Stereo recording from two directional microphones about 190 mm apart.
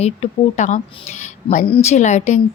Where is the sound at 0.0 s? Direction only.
35° left (ahead or behind).